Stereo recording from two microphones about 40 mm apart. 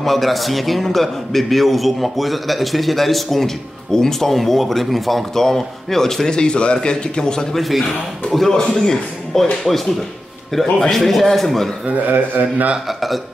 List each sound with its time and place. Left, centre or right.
0.0 s a man's voice: centre
6.3 s a man's voice: left
7.5 s a man's voice: centre
11.8 s a man's voice: right
12.8 s a man's voice: centre